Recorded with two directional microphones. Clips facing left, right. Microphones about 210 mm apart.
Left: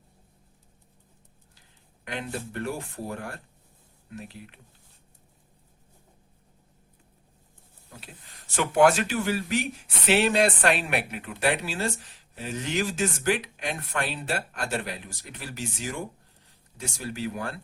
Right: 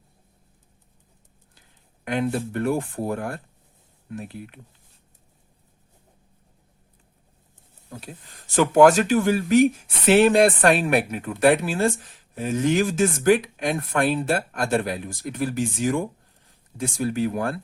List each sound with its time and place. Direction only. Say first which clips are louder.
2.0 s speech: right 9 dB; 50° right (ahead or behind)
8.5 s speech: right 6 dB; 40° right (ahead or behind)